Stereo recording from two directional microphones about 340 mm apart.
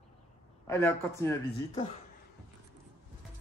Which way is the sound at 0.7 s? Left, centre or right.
Centre.